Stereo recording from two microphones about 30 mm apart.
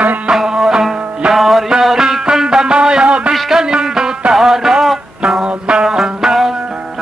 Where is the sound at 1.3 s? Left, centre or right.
Centre.